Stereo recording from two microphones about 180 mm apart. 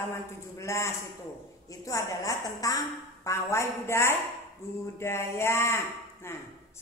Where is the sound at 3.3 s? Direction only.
15° left (ahead or behind).